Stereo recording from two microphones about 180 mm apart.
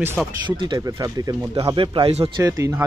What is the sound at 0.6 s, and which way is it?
Speech, 20° right (ahead or behind).